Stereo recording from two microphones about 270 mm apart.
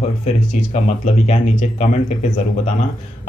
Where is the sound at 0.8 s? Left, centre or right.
Left.